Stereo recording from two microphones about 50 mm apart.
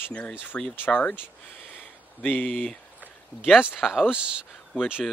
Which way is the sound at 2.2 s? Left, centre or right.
Left.